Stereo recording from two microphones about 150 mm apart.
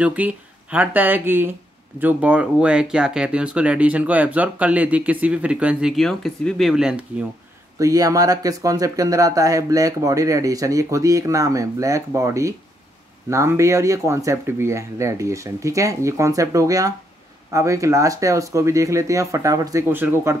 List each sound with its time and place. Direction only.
0.0 s speech: 10° right (ahead or behind)
7.8 s speech: 25° right (ahead or behind)